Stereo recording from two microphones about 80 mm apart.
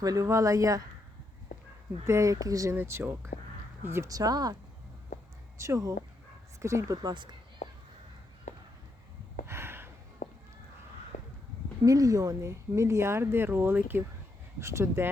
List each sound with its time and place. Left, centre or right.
0.0 s speech: right
2.0 s speech: right
2.7 s speech: right
4.1 s speech: right
5.5 s speech: right
7.0 s speech: right
9.5 s a sound: right
11.9 s speech: right
14.6 s speech: right